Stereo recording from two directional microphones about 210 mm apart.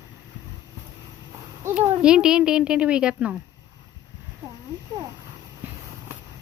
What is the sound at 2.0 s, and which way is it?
A woman's voice, 5° right (ahead or behind).